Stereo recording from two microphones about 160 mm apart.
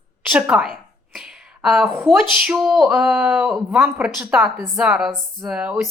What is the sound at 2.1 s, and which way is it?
Speech, 5° right (ahead or behind).